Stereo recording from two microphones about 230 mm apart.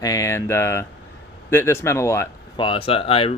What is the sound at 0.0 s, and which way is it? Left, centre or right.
Speech, centre.